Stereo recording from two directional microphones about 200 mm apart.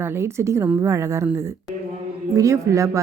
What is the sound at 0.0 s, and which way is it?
A man's voice, 15° right (ahead or behind).